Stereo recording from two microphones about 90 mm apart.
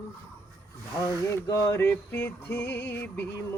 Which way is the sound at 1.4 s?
40° left (ahead or behind).